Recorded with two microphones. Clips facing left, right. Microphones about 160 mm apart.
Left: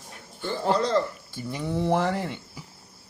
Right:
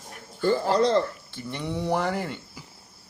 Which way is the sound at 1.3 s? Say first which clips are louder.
Left 3 dB; 5° left (ahead or behind).